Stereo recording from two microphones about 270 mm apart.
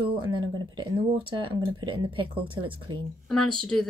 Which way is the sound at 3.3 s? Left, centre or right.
Centre.